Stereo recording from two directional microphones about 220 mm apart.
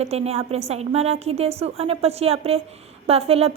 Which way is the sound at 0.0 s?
30° right (ahead or behind).